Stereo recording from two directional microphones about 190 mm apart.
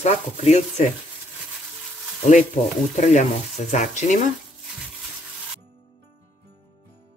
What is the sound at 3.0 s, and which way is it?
Sizzle, 40° left (ahead or behind).